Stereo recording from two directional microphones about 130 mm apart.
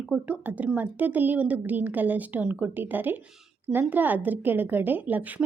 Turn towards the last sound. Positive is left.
turn(degrees=-10)  # may be behind; listen again after turning